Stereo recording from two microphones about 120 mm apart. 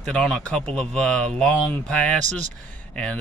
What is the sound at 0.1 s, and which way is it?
Speech, 5° left (ahead or behind).